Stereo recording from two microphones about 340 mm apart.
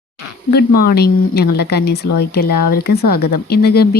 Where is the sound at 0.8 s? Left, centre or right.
Left.